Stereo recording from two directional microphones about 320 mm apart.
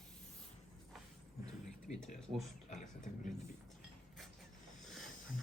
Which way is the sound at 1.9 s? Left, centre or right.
Left.